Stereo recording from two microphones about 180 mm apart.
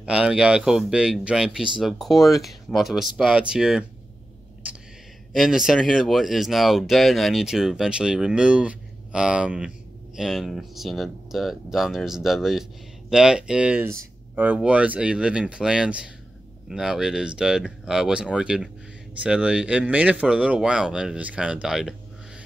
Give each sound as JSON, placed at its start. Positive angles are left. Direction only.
{"t": 0.0, "sound": "speech", "side_deg": -5}
{"t": 5.3, "sound": "speech", "side_deg": 0}